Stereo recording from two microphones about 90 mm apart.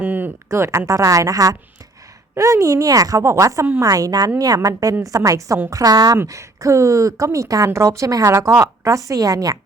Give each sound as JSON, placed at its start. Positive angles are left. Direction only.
{"t": 0.0, "sound": "a woman's voice", "side_deg": -20}